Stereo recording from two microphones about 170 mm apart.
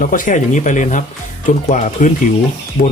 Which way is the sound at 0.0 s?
50° left (ahead or behind).